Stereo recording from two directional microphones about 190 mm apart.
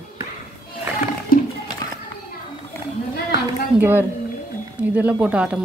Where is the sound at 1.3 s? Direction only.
50° left (ahead or behind).